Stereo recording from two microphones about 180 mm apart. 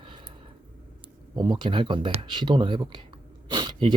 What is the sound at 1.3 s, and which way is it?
Speech, 25° right (ahead or behind).